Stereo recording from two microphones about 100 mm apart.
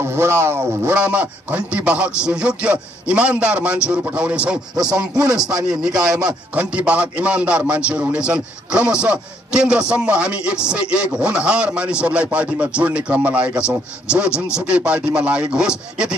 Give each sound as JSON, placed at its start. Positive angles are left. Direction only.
{"t": 0.0, "sound": "speech", "side_deg": -25}
{"t": 0.9, "sound": "a man's voice", "side_deg": -15}